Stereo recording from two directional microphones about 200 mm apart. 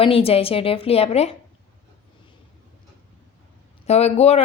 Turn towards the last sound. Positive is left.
turn(degrees=30)  # may be behind; listen again after turning